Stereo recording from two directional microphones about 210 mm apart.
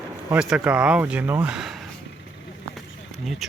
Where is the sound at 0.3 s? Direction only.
5° right (ahead or behind).